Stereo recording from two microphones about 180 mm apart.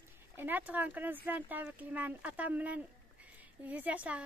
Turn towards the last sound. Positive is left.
turn(degrees=-5)  # may be behind; listen again after turning